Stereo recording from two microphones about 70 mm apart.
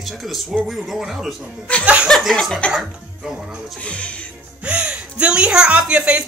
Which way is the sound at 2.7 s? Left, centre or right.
Centre.